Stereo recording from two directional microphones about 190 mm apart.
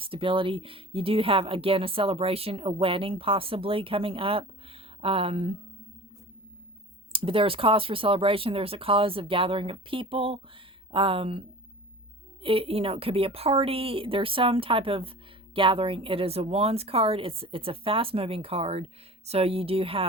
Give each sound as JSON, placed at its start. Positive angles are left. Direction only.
{"t": 0.0, "sound": "speech", "side_deg": -30}
{"t": 7.1, "sound": "speech", "side_deg": -30}